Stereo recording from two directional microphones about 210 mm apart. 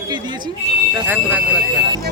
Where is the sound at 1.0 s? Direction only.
5° right (ahead or behind).